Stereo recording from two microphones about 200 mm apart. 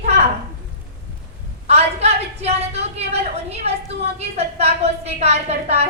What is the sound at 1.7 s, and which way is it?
A woman's voice, 30° right (ahead or behind).